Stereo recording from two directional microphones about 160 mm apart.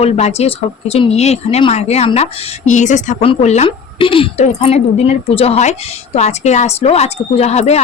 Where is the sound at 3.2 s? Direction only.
35° left (ahead or behind).